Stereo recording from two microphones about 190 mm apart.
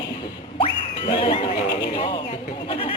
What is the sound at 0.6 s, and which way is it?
Music, 25° left (ahead or behind).